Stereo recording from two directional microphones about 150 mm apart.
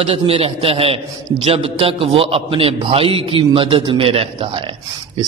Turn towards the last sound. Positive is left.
turn(degrees=-40)  # may be behind; listen again after turning